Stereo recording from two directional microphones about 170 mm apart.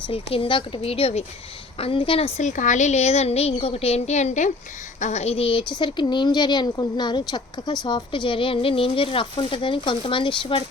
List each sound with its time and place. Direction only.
0.1 s speech: 35° left (ahead or behind)